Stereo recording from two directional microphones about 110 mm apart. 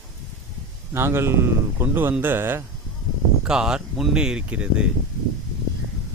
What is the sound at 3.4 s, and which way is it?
Speech, 5° right (ahead or behind).